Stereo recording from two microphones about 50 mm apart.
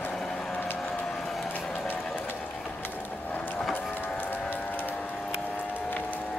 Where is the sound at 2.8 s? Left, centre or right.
Left.